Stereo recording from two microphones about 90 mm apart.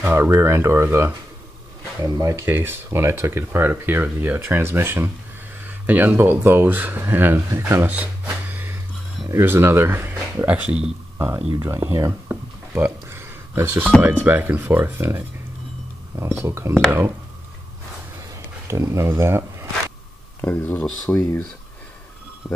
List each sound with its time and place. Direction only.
0.0 s speech: 25° right (ahead or behind)
2.1 s speech: 35° right (ahead or behind)
11.8 s a sound: 25° right (ahead or behind)
14.2 s speech: 20° right (ahead or behind)
16.4 s speech: 30° right (ahead or behind)
18.3 s a sound: 35° right (ahead or behind)
20.3 s speech: 20° left (ahead or behind)